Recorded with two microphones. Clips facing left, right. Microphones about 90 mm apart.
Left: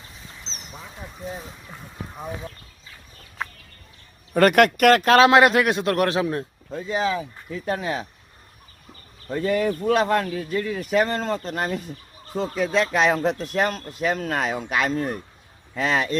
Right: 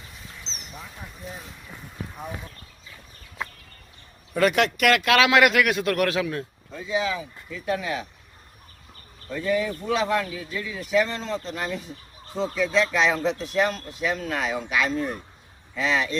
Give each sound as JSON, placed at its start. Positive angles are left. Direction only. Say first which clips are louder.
{"t": 4.4, "sound": "a man's voice", "louder": "left 5 dB", "side_deg": 55}
{"t": 9.4, "sound": "speech", "louder": "left 3 dB", "side_deg": 55}